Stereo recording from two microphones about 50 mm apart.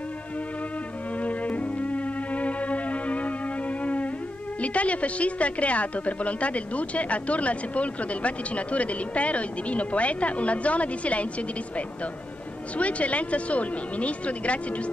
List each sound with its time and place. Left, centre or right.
1.1 s music: left
4.6 s a woman's voice: left